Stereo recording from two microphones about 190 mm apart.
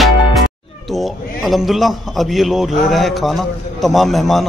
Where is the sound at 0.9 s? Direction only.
Centre (ahead or behind).